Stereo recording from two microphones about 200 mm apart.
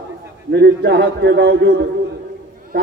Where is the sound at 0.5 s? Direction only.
55° right (ahead or behind).